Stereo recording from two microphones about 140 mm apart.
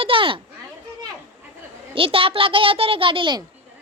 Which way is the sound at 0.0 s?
40° right (ahead or behind).